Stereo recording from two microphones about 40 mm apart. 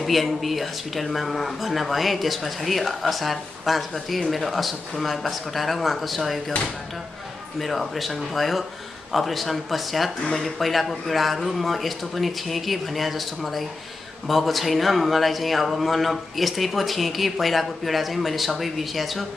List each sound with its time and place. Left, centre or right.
0.0 s speech: centre
7.5 s speech: centre